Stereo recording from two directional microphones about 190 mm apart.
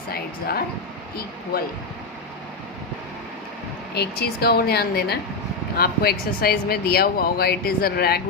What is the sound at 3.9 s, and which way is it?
Speech, 55° left (ahead or behind).